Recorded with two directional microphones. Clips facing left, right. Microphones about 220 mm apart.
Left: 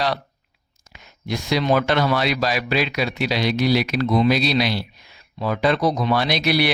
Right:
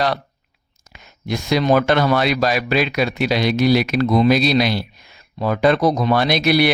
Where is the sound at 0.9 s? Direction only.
50° right (ahead or behind).